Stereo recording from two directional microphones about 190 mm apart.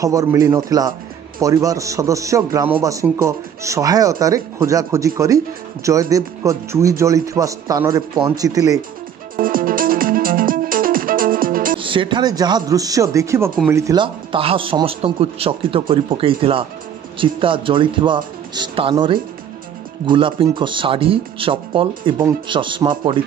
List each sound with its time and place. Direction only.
0.0 s a man's voice: 15° right (ahead or behind)
9.4 s music: 50° right (ahead or behind)
11.8 s a man's voice: 25° right (ahead or behind)